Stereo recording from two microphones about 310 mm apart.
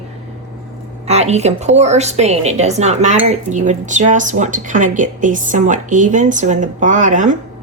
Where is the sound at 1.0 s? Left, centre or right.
Right.